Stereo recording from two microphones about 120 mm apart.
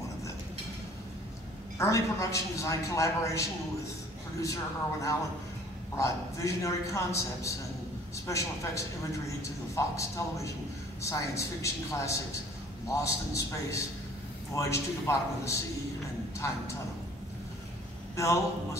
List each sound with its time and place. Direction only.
1.8 s a woman's voice: 25° left (ahead or behind)
5.9 s a woman's voice: 25° left (ahead or behind)
18.1 s a woman's voice: 25° left (ahead or behind)